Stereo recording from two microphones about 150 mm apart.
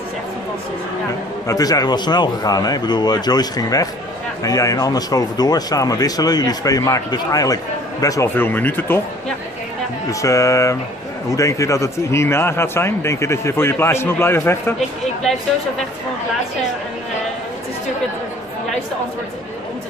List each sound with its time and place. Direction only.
1.5 s speech: 25° left (ahead or behind)
10.2 s speech: 20° left (ahead or behind)